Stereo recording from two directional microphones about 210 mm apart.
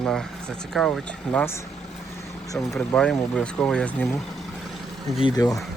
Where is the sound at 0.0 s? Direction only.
5° left (ahead or behind).